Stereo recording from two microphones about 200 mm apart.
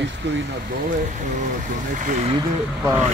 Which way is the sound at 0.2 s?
60° right (ahead or behind).